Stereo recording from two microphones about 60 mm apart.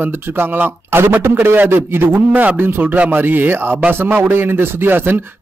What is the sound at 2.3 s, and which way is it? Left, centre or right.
A man's voice, right.